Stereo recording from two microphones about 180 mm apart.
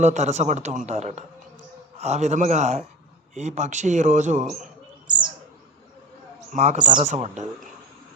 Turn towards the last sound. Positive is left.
turn(degrees=-40)  # may be behind; listen again after turning